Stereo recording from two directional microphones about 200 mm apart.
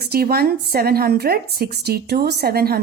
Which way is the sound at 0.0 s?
50° right (ahead or behind).